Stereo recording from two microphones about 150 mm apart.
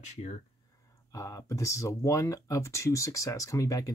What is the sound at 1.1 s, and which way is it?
Speech, 20° left (ahead or behind).